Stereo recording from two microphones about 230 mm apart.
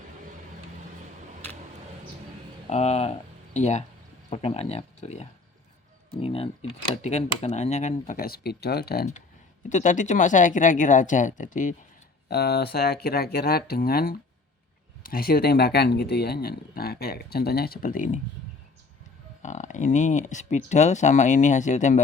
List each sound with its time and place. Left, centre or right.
2.6 s speech: left
12.3 s speech: left
19.4 s speech: left